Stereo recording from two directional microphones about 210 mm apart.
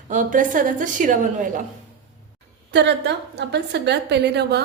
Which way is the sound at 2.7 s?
55° right (ahead or behind).